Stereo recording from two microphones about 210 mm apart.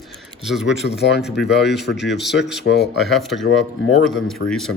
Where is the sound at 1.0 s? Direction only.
50° left (ahead or behind).